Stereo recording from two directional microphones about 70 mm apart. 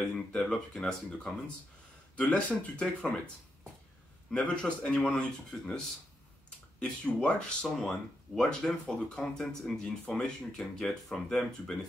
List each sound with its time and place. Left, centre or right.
0.1 s speech: centre
4.3 s speech: centre
6.8 s speech: centre